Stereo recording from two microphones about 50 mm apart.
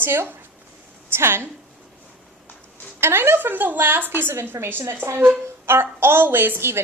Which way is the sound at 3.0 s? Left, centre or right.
Right.